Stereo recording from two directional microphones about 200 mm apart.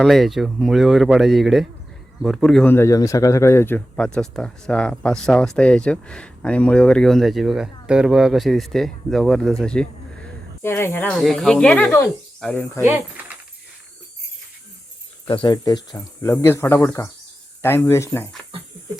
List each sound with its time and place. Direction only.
0.0 s speech: centre (ahead or behind)
12.8 s speech: 10° right (ahead or behind)
15.3 s speech: 20° left (ahead or behind)